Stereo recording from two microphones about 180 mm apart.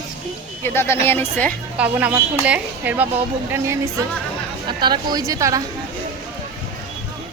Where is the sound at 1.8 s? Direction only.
10° right (ahead or behind).